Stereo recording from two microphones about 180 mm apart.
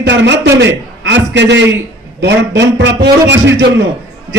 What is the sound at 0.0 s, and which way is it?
Speech, 75° right (ahead or behind).